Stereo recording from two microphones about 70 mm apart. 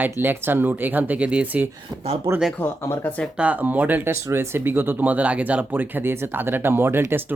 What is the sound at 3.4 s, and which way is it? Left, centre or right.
Speech, right.